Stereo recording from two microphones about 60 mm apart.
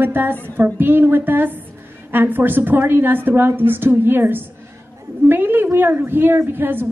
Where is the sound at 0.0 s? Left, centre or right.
Right.